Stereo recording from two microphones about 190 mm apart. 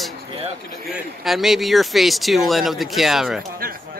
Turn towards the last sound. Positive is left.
turn(degrees=0)  # may be behind; listen again after turning